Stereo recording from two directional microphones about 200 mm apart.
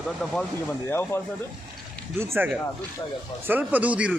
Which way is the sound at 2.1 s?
10° right (ahead or behind).